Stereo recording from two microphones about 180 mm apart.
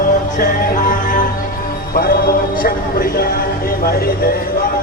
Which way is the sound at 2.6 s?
55° left (ahead or behind).